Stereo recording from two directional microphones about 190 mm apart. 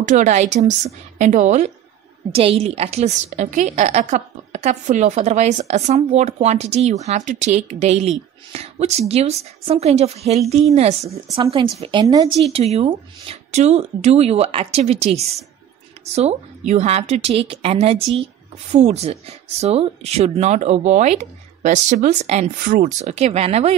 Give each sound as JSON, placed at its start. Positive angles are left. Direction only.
{"t": 0.0, "sound": "a woman's voice", "side_deg": -40}
{"t": 12.5, "sound": "a woman's voice", "side_deg": -35}